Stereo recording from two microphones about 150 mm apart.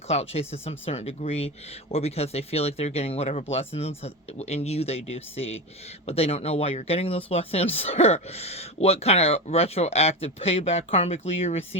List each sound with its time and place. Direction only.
0.1 s speech: 45° left (ahead or behind)